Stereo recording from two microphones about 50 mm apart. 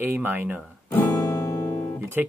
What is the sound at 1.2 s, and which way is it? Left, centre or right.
Music, left.